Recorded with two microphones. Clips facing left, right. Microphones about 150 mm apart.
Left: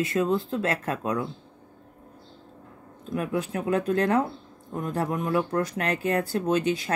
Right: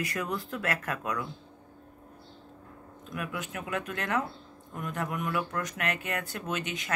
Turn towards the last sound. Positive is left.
turn(degrees=35)  # may be behind; listen again after turning